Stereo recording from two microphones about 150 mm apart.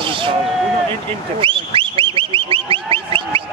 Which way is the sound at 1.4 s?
35° right (ahead or behind).